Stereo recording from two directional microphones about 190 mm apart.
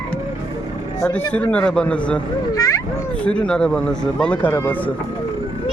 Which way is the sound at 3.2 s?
5° left (ahead or behind).